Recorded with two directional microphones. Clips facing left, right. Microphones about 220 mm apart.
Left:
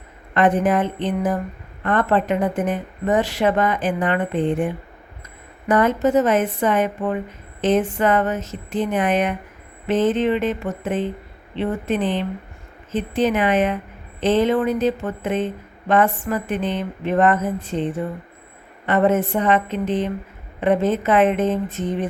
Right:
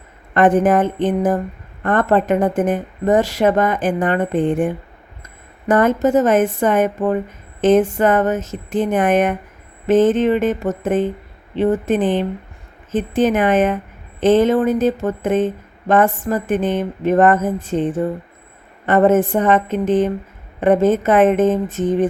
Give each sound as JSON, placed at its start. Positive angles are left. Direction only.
{"t": 0.3, "sound": "a woman's voice", "side_deg": -45}